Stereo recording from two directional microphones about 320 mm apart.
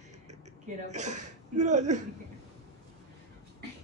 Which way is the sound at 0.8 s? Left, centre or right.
Right.